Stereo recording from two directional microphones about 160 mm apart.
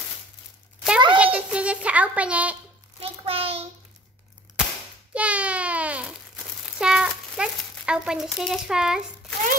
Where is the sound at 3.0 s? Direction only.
35° right (ahead or behind).